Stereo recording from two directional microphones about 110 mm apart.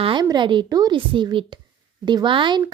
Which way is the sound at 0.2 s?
40° right (ahead or behind).